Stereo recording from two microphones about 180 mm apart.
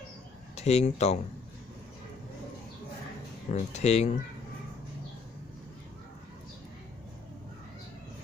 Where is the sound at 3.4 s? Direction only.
40° left (ahead or behind).